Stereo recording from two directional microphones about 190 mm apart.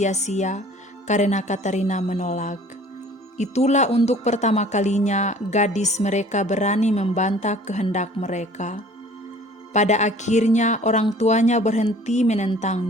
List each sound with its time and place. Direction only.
0.0 s speech: 35° left (ahead or behind)